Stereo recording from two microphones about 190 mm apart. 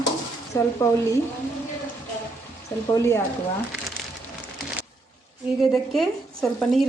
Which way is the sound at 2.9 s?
15° left (ahead or behind).